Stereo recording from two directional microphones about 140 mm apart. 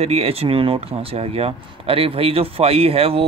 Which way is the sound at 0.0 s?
45° right (ahead or behind).